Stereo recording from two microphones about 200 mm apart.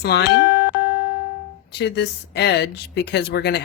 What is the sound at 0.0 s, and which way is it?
Speech, 55° left (ahead or behind).